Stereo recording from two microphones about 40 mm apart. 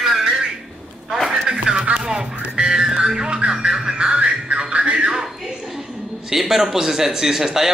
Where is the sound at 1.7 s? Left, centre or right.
Right.